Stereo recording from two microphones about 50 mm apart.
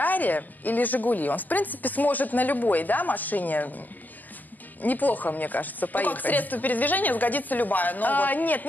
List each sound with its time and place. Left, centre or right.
0.0 s a woman's voice: left
4.8 s a woman's voice: left